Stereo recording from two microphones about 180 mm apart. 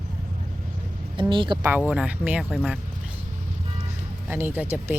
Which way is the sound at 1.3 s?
25° right (ahead or behind).